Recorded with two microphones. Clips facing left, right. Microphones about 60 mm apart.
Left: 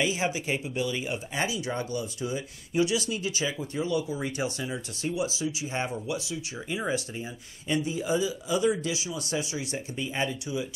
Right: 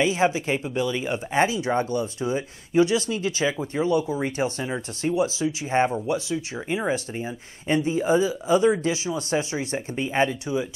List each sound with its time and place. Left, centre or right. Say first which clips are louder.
0.0 s speech: right 6 dB; right